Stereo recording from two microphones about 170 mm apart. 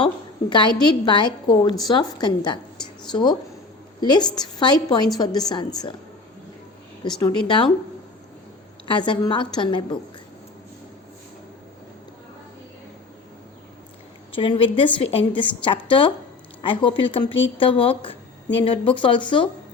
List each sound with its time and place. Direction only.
0.5 s a woman's voice: 25° left (ahead or behind)
7.2 s a woman's voice: 25° left (ahead or behind)
8.9 s a woman's voice: 25° left (ahead or behind)
14.3 s a woman's voice: 30° left (ahead or behind)